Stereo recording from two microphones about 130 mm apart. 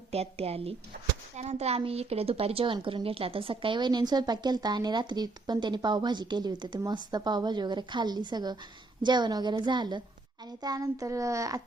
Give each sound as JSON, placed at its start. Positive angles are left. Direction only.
{"t": 0.1, "sound": "a woman's voice", "side_deg": -50}